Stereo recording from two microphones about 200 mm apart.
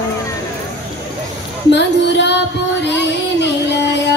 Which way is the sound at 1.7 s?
60° left (ahead or behind).